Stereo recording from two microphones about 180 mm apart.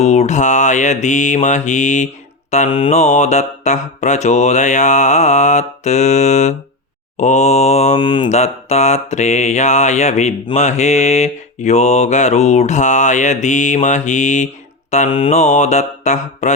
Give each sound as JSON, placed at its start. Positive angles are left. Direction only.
{"t": 0.0, "sound": "mantra", "side_deg": 40}